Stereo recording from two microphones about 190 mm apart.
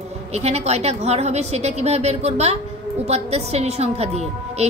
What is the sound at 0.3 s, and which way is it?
A woman's voice, 35° right (ahead or behind).